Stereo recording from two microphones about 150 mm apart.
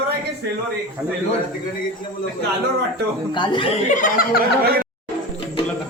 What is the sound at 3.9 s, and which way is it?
Speech, 65° left (ahead or behind).